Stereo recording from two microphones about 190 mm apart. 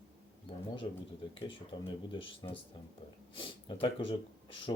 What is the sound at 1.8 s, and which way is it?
Speech, 25° left (ahead or behind).